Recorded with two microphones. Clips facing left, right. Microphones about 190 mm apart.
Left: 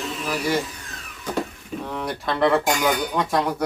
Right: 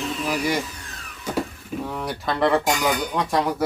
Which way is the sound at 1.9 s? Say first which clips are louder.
Left 1 dB; centre (ahead or behind).